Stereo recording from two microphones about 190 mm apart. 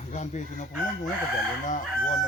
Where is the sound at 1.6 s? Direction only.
40° left (ahead or behind).